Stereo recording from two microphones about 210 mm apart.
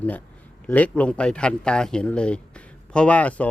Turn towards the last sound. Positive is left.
turn(degrees=5)  # may be behind; listen again after turning